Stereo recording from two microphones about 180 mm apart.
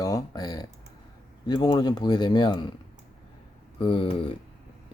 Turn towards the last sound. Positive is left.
turn(degrees=30)  # may be behind; listen again after turning